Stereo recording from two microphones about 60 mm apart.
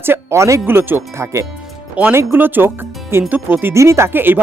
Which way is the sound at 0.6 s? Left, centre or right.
Right.